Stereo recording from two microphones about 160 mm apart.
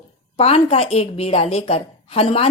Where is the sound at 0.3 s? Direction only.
40° left (ahead or behind).